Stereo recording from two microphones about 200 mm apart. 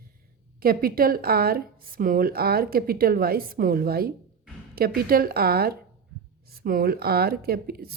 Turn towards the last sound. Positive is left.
turn(degrees=-50)  # may be behind; listen again after turning